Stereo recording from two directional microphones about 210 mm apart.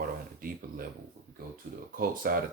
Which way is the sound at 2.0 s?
45° right (ahead or behind).